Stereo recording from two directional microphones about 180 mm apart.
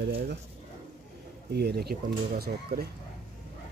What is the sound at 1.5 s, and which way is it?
Speech, 65° right (ahead or behind).